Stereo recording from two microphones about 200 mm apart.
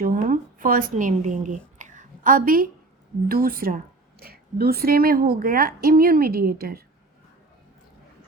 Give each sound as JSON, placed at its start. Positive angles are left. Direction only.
{"t": 0.0, "sound": "a woman's voice", "side_deg": -45}